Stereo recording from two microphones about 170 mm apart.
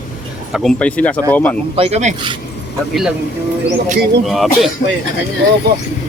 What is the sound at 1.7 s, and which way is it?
Speech, 35° right (ahead or behind).